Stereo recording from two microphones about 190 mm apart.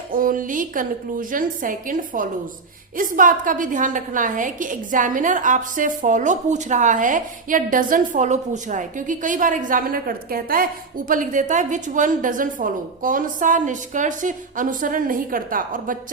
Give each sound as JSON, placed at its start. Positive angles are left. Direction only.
{"t": 0.1, "sound": "a woman's voice", "side_deg": -45}